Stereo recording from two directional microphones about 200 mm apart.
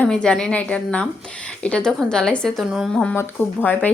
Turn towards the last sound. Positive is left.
turn(degrees=10)  # may be behind; listen again after turning